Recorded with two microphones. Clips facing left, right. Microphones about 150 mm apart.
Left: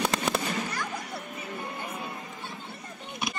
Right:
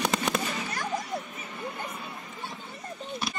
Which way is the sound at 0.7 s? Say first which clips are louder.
Right 3 dB; 45° right (ahead or behind).